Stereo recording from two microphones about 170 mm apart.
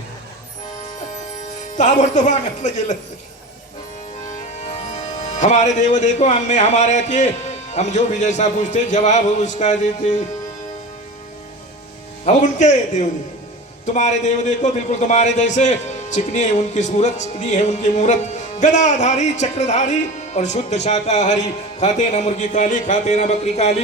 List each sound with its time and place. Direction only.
1.7 s speech: 45° left (ahead or behind)
4.9 s speech: 45° left (ahead or behind)
12.2 s speech: 45° left (ahead or behind)